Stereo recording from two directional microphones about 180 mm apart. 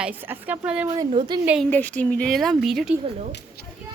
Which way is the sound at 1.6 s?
10° left (ahead or behind).